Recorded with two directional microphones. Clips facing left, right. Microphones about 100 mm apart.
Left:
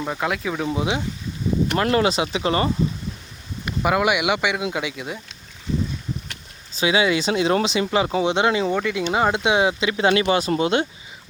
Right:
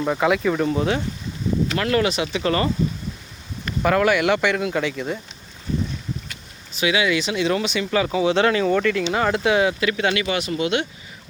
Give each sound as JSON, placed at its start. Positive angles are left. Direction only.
{"t": 0.0, "sound": "speech", "side_deg": 0}
{"t": 1.7, "sound": "speech", "side_deg": 25}
{"t": 3.7, "sound": "speech", "side_deg": 10}
{"t": 6.7, "sound": "speech", "side_deg": 25}